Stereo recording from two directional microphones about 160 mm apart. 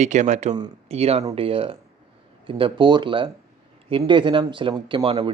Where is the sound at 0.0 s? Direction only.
45° right (ahead or behind).